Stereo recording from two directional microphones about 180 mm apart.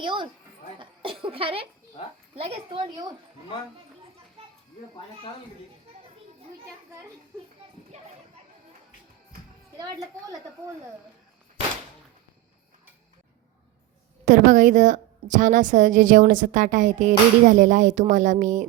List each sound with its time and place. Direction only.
0.0 s a woman's voice: 25° right (ahead or behind)
7.9 s a sound: 35° right (ahead or behind)
9.7 s a woman's voice: 20° right (ahead or behind)
14.3 s a woman's voice: 45° right (ahead or behind)